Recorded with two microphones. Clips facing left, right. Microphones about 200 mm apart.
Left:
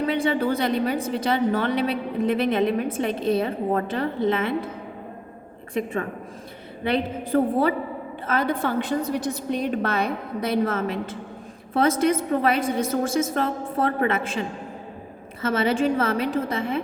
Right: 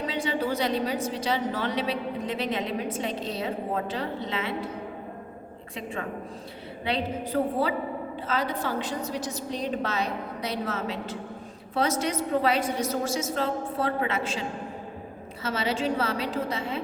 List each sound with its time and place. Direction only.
0.1 s a woman's voice: 55° left (ahead or behind)
6.8 s a woman's voice: 50° left (ahead or behind)